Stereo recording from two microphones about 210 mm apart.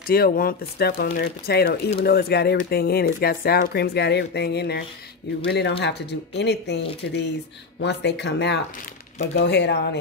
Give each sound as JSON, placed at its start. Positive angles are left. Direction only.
{"t": 0.0, "sound": "speech", "side_deg": 45}